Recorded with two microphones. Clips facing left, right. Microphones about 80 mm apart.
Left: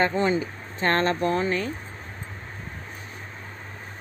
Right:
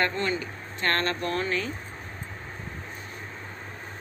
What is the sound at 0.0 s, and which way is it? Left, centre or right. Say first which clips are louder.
Speech: left 5 dB; centre.